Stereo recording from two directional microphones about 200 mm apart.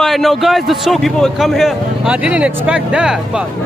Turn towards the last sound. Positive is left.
turn(degrees=-5)  # may be behind; listen again after turning